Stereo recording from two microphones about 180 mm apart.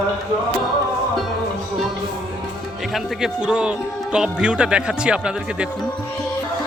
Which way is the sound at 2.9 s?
Centre (ahead or behind).